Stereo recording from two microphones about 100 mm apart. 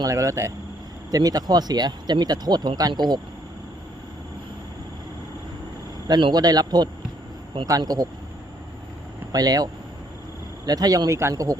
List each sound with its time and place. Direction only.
0.0 s speech: 35° right (ahead or behind)
6.1 s speech: 45° right (ahead or behind)
9.3 s speech: 40° right (ahead or behind)
10.7 s speech: 40° right (ahead or behind)